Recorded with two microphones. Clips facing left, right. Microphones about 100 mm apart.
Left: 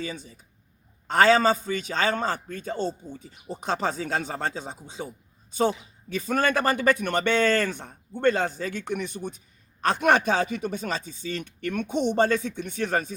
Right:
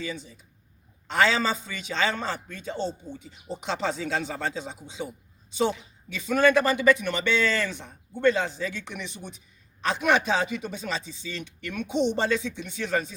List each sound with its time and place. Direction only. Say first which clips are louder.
0.0 s a man's voice: even; 40° left (ahead or behind)
6.1 s a man's voice: right 3 dB; 45° left (ahead or behind)